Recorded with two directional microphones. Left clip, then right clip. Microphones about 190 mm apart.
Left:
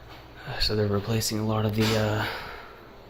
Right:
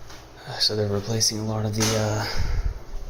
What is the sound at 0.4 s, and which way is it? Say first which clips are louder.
Speech: right 3 dB; 5° left (ahead or behind).